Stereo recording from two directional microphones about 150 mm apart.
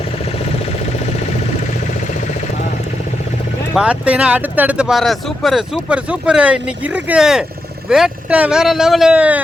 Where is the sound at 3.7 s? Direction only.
10° right (ahead or behind).